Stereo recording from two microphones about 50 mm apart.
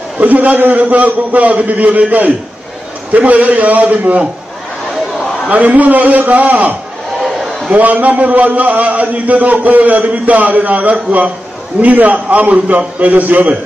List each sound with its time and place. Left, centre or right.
0.2 s a man's voice: right
5.5 s a man's voice: right